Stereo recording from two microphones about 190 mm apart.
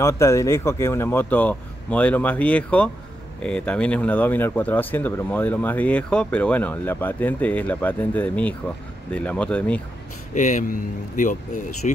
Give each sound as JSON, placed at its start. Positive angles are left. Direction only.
{"t": 0.0, "sound": "speech", "side_deg": 15}
{"t": 10.3, "sound": "speech", "side_deg": 40}